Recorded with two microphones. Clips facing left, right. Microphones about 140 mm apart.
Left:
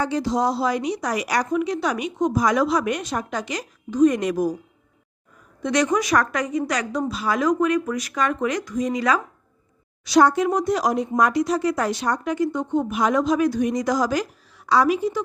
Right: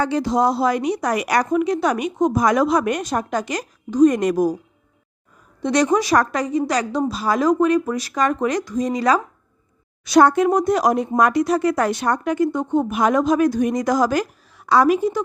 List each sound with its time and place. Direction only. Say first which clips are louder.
0.0 s a woman's voice: right 3 dB; 60° right (ahead or behind)
5.6 s a woman's voice: right 3 dB; 35° right (ahead or behind)
10.0 s a woman's voice: right 3 dB; 55° right (ahead or behind)